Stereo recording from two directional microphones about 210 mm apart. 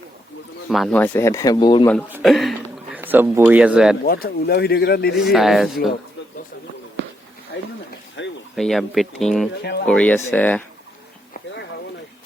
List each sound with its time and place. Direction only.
0.7 s speech: centre (ahead or behind); by 1.9 s 20° left (ahead or behind)
2.0 s speech: 5° right (ahead or behind)
4.0 s speech: 45° left (ahead or behind)
5.2 s speech: centre (ahead or behind)
7.5 s a sound: 55° left (ahead or behind)
8.5 s speech: centre (ahead or behind)
9.5 s speech: 50° left (ahead or behind)
9.8 s speech: 5° left (ahead or behind)